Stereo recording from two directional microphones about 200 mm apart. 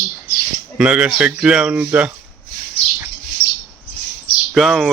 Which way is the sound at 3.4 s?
45° left (ahead or behind).